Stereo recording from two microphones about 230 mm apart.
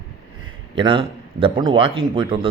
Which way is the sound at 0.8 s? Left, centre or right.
Right.